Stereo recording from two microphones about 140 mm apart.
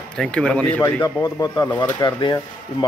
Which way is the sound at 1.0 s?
30° left (ahead or behind).